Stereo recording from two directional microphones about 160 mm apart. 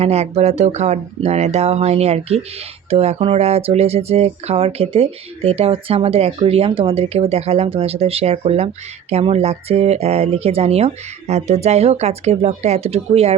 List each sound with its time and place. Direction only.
0.0 s speech: 40° right (ahead or behind)